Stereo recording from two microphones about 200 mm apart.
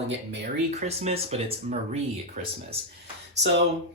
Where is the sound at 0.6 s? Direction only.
35° right (ahead or behind).